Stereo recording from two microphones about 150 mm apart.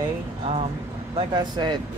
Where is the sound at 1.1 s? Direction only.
30° right (ahead or behind).